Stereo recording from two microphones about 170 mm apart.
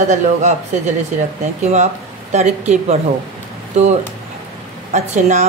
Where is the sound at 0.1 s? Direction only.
45° right (ahead or behind).